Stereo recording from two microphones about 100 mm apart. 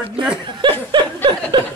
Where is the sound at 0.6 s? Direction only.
50° right (ahead or behind).